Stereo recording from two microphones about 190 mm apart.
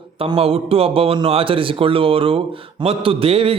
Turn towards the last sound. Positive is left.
turn(degrees=-30)  # may be behind; listen again after turning